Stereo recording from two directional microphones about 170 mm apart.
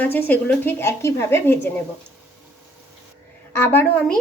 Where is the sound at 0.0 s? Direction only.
10° left (ahead or behind).